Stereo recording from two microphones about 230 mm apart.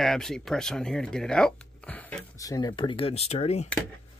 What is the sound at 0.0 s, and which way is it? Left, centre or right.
Speech, centre.